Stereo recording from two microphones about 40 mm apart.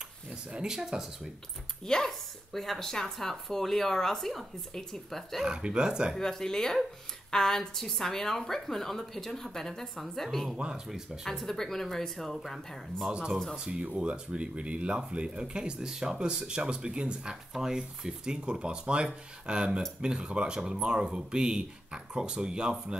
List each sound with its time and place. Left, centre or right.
0.5 s speech: right
0.7 s speech: centre
2.0 s a woman's voice: centre
5.4 s speech: centre
6.1 s speech: centre
13.1 s speech: centre
15.9 s speech: centre